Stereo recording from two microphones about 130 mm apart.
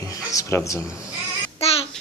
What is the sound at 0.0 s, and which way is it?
Speech, 25° left (ahead or behind).